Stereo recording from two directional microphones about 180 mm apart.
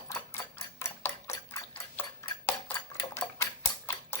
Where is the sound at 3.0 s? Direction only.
15° left (ahead or behind).